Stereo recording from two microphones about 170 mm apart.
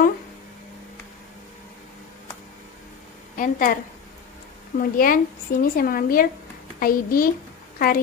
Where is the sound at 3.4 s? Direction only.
50° left (ahead or behind).